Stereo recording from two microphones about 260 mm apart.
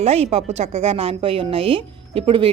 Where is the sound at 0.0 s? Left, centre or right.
Right.